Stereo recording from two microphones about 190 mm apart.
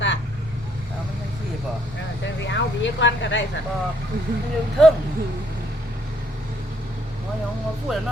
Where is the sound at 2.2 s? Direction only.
70° left (ahead or behind).